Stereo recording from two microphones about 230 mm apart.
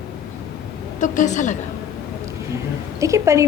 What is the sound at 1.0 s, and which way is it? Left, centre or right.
Speech, left.